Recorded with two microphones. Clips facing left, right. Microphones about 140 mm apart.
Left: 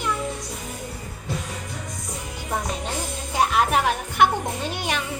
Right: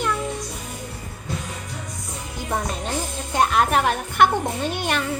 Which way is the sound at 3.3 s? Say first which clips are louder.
Right 1 dB; 5° left (ahead or behind).